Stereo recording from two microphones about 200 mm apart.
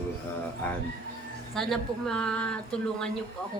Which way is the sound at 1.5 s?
Centre (ahead or behind).